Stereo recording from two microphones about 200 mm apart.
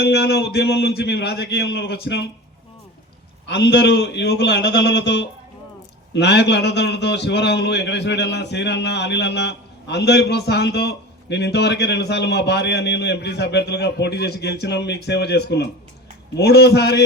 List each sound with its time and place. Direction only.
0.0 s a man's voice: 55° left (ahead or behind)
3.4 s a man's voice: 60° left (ahead or behind)